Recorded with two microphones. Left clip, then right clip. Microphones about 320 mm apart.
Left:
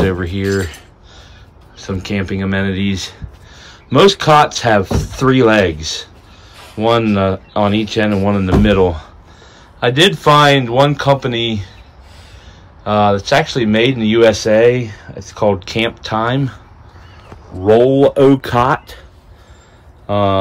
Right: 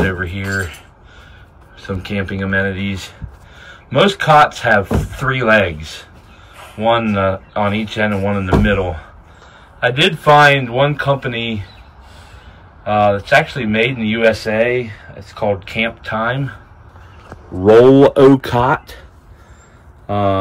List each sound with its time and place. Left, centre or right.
0.0 s speech: centre
1.8 s speech: centre
12.8 s speech: centre
14.5 s speech: left
15.7 s speech: centre
18.3 s speech: centre
20.1 s speech: centre